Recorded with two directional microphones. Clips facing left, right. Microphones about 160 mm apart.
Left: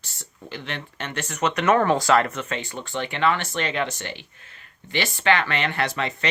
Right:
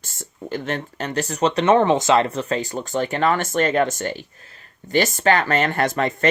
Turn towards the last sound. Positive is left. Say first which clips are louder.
# right 6 dB
turn(degrees=-45)  # may be behind; listen again after turning